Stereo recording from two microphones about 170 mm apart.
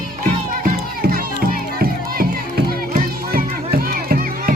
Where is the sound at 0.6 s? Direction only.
60° right (ahead or behind).